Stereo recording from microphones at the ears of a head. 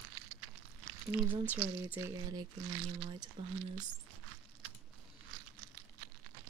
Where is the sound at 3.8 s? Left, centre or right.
Right.